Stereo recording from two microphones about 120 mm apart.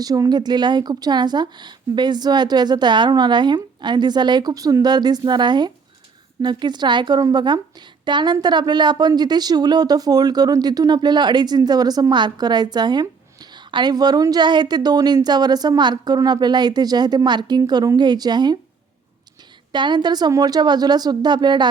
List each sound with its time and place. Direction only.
0.0 s a woman's voice: 30° right (ahead or behind)
19.7 s a woman's voice: 40° right (ahead or behind)